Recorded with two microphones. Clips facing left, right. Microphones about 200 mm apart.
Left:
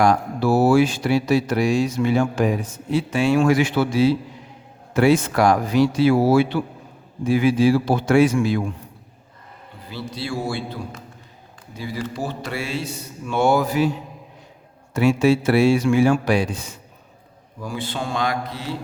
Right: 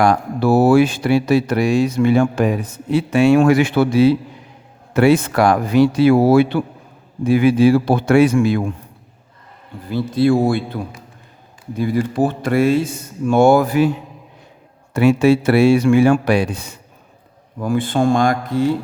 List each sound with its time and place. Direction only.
0.0 s speech: 60° right (ahead or behind)
9.9 s speech: 55° right (ahead or behind)
11.8 s speech: 55° right (ahead or behind)
14.9 s speech: 60° right (ahead or behind)